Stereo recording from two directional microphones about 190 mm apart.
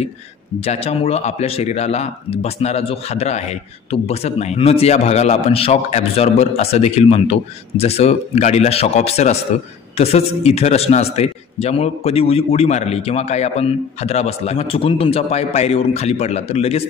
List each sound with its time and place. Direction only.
0.7 s speech: 35° left (ahead or behind)